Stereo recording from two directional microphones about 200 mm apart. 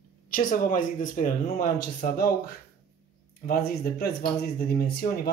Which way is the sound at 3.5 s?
50° left (ahead or behind).